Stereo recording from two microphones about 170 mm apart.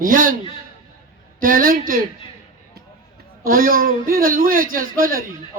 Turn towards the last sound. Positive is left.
turn(degrees=-55)  # may be behind; listen again after turning